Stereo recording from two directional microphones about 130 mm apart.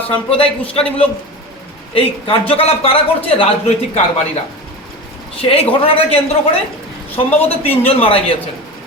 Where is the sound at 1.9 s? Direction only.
45° left (ahead or behind).